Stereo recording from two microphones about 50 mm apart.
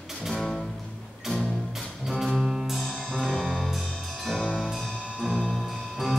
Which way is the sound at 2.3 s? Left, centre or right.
Centre.